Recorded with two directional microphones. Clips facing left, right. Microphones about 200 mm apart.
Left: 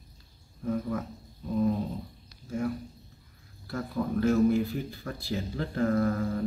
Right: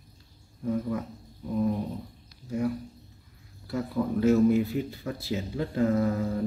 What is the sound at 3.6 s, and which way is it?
Speech, 15° right (ahead or behind).